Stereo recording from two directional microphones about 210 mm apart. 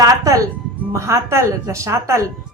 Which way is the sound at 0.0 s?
15° right (ahead or behind).